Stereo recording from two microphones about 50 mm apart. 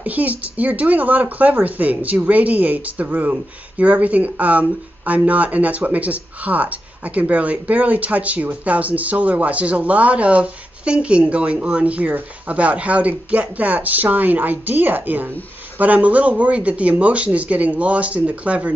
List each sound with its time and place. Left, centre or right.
0.0 s speech: right